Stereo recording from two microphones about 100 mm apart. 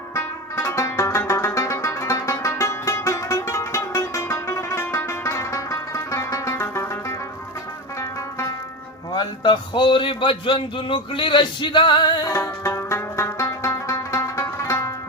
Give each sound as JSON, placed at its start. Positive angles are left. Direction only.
{"t": 0.1, "sound": "music", "side_deg": 30}
{"t": 9.1, "sound": "a man's voice", "side_deg": 50}
{"t": 12.3, "sound": "music", "side_deg": 30}